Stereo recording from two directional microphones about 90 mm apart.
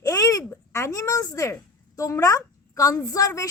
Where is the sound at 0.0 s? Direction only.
40° left (ahead or behind).